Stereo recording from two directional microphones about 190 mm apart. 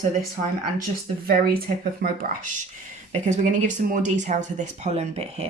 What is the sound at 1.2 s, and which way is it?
Speech, 50° right (ahead or behind).